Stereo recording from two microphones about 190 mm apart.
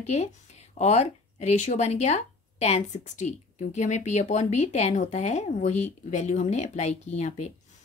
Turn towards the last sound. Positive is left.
turn(degrees=35)  # may be behind; listen again after turning